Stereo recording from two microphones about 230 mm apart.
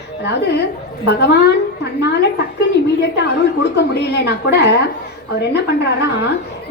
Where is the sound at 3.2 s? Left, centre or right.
Left.